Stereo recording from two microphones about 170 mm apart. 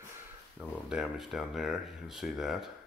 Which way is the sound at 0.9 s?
5° right (ahead or behind).